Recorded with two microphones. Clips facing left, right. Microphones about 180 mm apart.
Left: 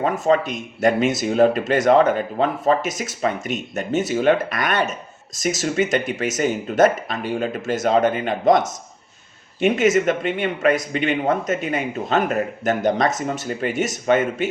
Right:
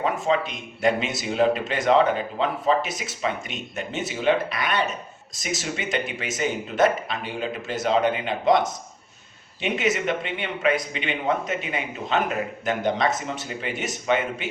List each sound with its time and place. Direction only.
0.0 s speech: 45° left (ahead or behind)